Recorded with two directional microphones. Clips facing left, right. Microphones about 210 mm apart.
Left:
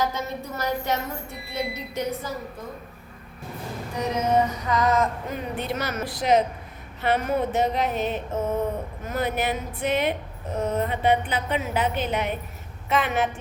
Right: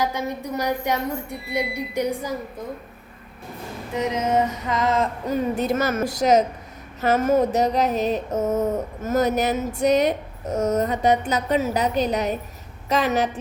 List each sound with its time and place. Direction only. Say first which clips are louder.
0.0 s a woman's voice: right 2 dB; 15° right (ahead or behind)
3.9 s music: right 1 dB; 20° right (ahead or behind)
5.3 s speech: right 7 dB; 40° right (ahead or behind)
7.0 s a sound: right 5 dB; 45° right (ahead or behind)